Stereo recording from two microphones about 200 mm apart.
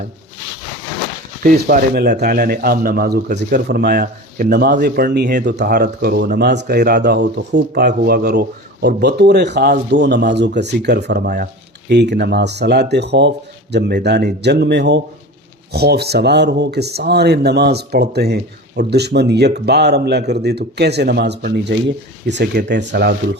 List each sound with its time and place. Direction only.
1.5 s speech: 45° right (ahead or behind)